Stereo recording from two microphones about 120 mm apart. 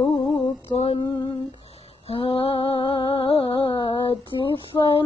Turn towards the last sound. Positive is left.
turn(degrees=45)  # may be behind; listen again after turning